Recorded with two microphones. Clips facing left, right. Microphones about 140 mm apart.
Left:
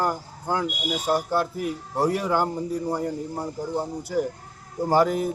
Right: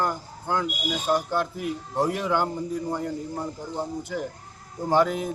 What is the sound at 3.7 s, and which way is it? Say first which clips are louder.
Speech: left 5 dB; 10° left (ahead or behind).